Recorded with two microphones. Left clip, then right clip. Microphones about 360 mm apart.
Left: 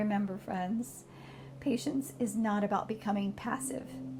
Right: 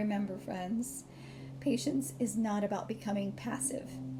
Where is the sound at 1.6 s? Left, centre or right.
Centre.